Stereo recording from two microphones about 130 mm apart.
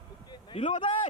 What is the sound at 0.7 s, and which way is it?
Speech, 75° left (ahead or behind).